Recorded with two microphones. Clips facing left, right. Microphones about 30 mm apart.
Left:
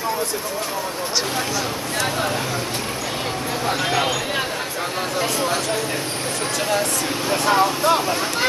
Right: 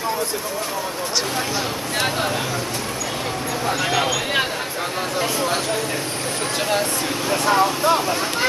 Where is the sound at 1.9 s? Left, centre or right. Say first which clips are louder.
Right 1 dB; centre.